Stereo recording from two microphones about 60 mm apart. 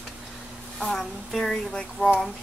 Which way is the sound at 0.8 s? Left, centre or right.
Centre.